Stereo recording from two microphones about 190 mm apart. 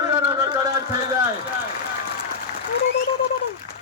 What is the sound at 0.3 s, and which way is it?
Music, 20° right (ahead or behind).